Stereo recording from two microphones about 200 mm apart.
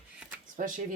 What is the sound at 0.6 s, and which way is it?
Speech, 40° right (ahead or behind).